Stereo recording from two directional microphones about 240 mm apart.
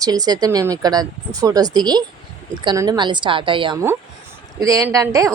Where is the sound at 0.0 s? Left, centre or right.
Centre.